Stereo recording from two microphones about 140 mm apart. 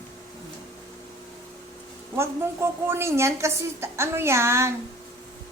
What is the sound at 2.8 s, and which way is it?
A woman's voice, 20° right (ahead or behind).